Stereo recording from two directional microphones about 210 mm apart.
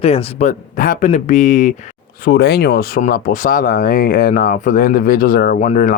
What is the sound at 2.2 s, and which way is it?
Speech, 50° left (ahead or behind).